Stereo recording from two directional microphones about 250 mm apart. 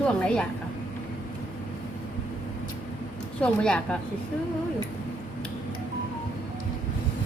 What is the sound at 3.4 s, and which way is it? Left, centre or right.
Speech, centre.